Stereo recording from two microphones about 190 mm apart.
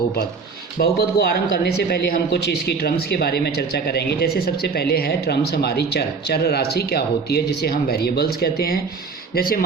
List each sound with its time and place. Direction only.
0.8 s speech: 55° left (ahead or behind)